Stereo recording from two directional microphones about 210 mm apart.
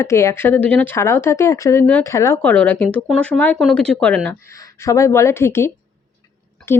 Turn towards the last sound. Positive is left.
turn(degrees=10)  # may be behind; listen again after turning